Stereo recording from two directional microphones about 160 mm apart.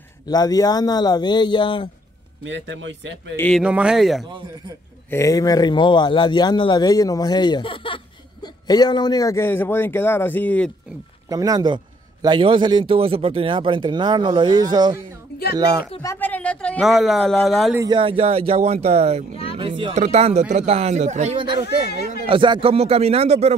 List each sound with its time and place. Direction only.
0.3 s speech: 25° left (ahead or behind)
3.3 s speech: 5° left (ahead or behind)
3.6 s speech: 5° right (ahead or behind)
5.1 s speech: 20° left (ahead or behind)
11.2 s a man's voice: 20° right (ahead or behind)
16.0 s speech: 15° left (ahead or behind)
17.7 s speech: 30° right (ahead or behind); by 21.4 s 45° right (ahead or behind)
21.6 s speech: 90° left
22.2 s speech: 30° right (ahead or behind)